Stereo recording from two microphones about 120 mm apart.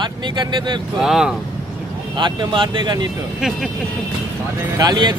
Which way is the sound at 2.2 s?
40° right (ahead or behind).